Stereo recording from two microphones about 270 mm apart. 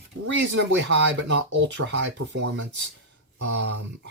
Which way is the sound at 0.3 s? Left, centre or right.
Right.